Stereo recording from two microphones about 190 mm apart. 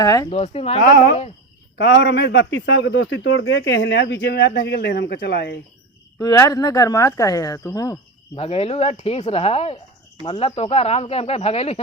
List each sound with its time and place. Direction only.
0.0 s speech: 15° left (ahead or behind)
0.3 s speech: 30° left (ahead or behind)
1.8 s a man's voice: 65° left (ahead or behind)
6.1 s speech: 20° left (ahead or behind)
8.4 s speech: 35° left (ahead or behind)